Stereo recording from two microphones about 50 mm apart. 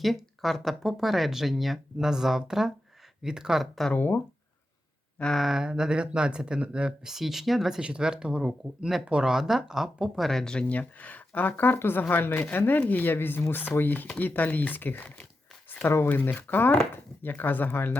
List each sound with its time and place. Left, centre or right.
0.0 s speech: centre
3.6 s speech: centre
3.9 s speech: left
5.4 s speech: centre
7.0 s speech: centre
7.8 s speech: centre
9.0 s speech: right
9.3 s speech: centre
10.2 s speech: centre
10.7 s speech: left